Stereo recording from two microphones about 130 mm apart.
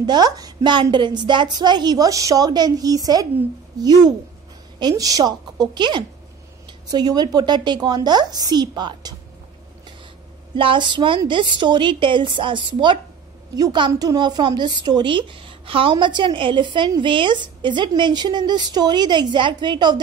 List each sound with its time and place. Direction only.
0.0 s speech: 30° right (ahead or behind)
10.5 s speech: 40° right (ahead or behind)